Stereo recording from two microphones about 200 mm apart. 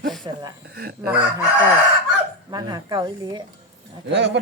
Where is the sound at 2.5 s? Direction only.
20° right (ahead or behind).